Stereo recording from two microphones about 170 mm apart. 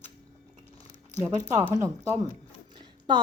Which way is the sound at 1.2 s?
20° right (ahead or behind).